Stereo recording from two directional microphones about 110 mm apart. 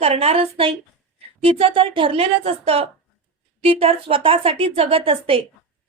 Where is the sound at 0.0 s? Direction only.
65° right (ahead or behind).